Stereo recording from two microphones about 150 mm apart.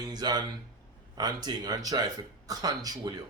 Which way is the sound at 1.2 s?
25° right (ahead or behind).